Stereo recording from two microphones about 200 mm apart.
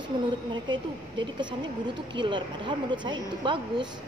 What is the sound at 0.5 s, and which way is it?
Speech, 25° right (ahead or behind).